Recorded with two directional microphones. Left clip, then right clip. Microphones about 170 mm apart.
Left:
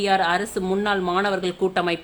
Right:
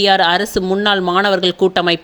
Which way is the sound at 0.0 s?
40° right (ahead or behind).